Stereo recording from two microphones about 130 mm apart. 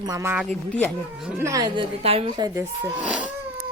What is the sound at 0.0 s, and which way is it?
Speech, 25° right (ahead or behind).